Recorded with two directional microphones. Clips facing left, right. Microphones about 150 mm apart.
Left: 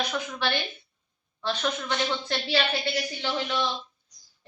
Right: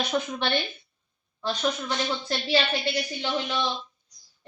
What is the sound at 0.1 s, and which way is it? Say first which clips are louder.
Speech: right 3 dB; 25° right (ahead or behind).